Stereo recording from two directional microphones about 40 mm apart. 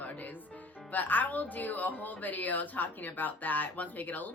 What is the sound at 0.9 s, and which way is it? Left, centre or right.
Speech, left.